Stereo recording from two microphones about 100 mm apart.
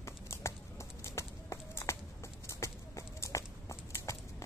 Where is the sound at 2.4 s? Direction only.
30° left (ahead or behind).